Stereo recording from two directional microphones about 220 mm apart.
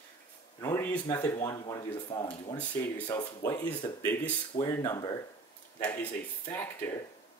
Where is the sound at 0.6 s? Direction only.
10° left (ahead or behind).